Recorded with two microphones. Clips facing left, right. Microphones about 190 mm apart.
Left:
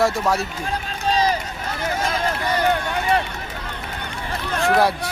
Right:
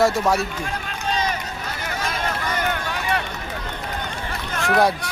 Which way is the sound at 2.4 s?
30° left (ahead or behind).